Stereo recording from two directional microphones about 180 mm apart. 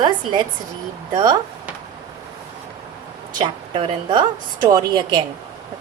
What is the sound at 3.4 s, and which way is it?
A woman's voice, 25° right (ahead or behind).